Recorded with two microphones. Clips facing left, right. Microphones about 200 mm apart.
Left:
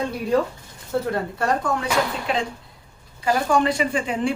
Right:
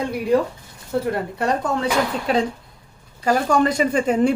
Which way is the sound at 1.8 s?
40° right (ahead or behind).